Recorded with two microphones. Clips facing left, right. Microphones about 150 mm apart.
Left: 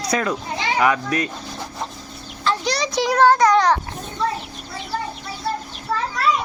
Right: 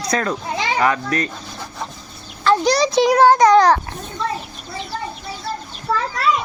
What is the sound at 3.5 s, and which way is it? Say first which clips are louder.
Speech: right 4 dB; 40° right (ahead or behind).